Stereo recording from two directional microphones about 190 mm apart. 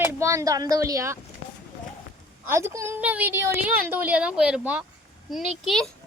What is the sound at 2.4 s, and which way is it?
A woman's voice, 15° right (ahead or behind).